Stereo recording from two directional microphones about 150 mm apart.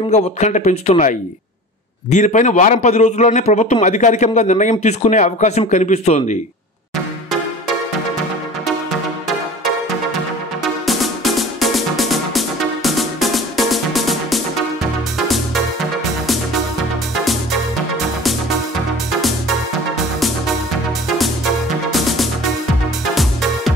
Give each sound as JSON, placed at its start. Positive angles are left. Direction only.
{"t": 0.1, "sound": "a man's voice", "side_deg": 50}
{"t": 10.6, "sound": "music", "side_deg": 0}
{"t": 17.1, "sound": "music", "side_deg": 0}
{"t": 21.9, "sound": "music", "side_deg": 0}